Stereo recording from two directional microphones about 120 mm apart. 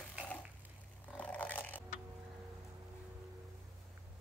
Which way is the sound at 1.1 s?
10° left (ahead or behind).